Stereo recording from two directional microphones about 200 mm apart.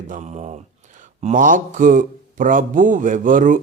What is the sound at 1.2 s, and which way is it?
A man's voice, 40° right (ahead or behind).